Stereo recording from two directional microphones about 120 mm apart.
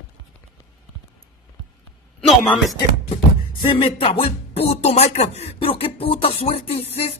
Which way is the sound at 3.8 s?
50° left (ahead or behind).